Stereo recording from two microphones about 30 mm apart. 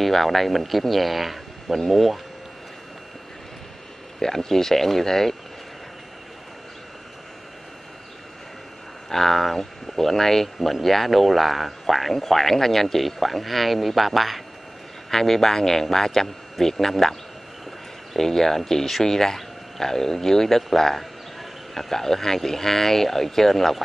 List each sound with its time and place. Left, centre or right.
0.0 s speech: centre
4.2 s speech: centre
9.1 s speech: centre
18.1 s speech: centre